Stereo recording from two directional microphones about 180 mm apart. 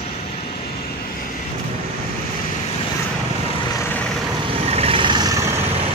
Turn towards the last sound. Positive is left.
turn(degrees=-20)  # may be behind; listen again after turning